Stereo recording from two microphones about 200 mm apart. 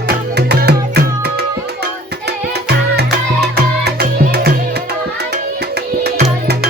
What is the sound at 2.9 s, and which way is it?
Music, 55° right (ahead or behind).